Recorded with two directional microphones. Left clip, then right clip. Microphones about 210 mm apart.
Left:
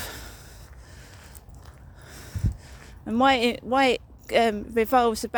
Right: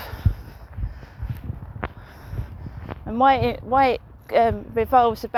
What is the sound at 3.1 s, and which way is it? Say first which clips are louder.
Speech: right 3 dB; 55° left (ahead or behind).